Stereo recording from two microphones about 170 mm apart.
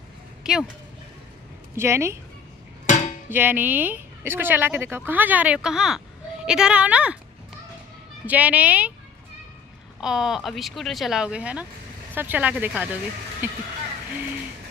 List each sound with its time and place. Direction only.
0.4 s a sound: 5° right (ahead or behind)
1.8 s speech: 15° right (ahead or behind)
3.3 s speech: 10° right (ahead or behind)
8.3 s speech: 10° right (ahead or behind)
9.9 s speech: 5° right (ahead or behind)